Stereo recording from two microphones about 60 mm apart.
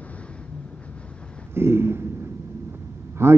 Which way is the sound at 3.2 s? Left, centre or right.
Right.